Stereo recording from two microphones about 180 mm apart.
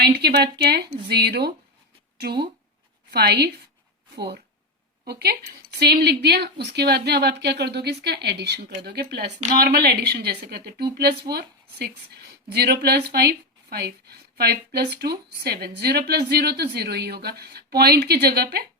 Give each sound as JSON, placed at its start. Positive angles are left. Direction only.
{"t": 0.0, "sound": "speech", "side_deg": -65}